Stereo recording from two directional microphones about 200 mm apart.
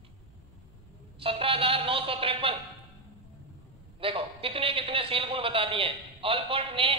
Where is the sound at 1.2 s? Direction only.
25° right (ahead or behind).